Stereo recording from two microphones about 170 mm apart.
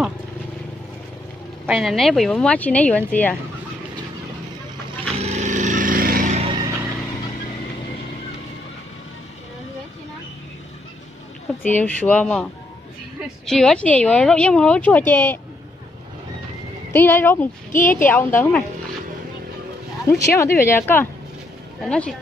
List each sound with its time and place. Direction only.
1.7 s a woman's voice: centre (ahead or behind)
5.1 s a sound: 40° right (ahead or behind)
6.4 s a sound: 25° right (ahead or behind)
11.6 s a woman's voice: 10° left (ahead or behind)
13.5 s a woman's voice: 5° left (ahead or behind)
16.9 s a woman's voice: 15° left (ahead or behind)
17.7 s a woman's voice: 50° left (ahead or behind)
18.1 s a woman's voice: 10° left (ahead or behind)
20.1 s a woman's voice: 15° left (ahead or behind)